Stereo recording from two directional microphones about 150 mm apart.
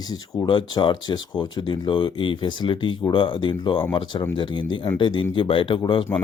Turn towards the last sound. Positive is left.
turn(degrees=30)  # may be behind; listen again after turning